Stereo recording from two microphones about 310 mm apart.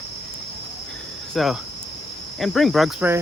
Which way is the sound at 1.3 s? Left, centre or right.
Centre.